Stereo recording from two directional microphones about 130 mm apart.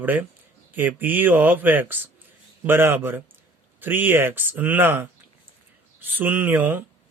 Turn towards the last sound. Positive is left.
turn(degrees=-15)  # may be behind; listen again after turning